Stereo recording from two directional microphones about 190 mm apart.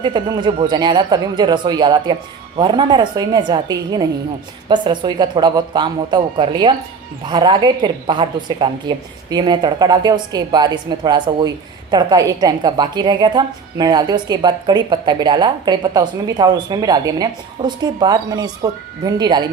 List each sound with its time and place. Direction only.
0.0 s a woman's voice: 25° right (ahead or behind)